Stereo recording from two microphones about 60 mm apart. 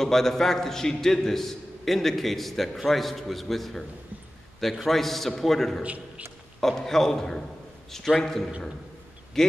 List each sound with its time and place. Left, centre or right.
0.0 s a man's voice: centre
5.8 s a man's voice: right
6.6 s a man's voice: centre